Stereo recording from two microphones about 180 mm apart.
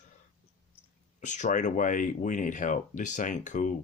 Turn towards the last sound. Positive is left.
turn(degrees=45)  # may be behind; listen again after turning